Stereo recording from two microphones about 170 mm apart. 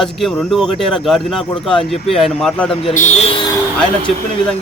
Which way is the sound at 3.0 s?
40° left (ahead or behind).